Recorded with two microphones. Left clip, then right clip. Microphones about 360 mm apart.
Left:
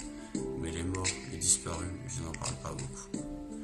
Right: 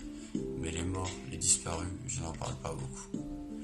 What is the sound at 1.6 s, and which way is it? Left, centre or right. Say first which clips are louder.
Speech: right 1 dB; centre.